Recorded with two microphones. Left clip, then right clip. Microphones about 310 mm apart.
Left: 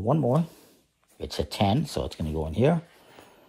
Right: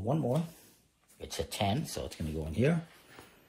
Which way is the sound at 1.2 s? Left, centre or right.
Left.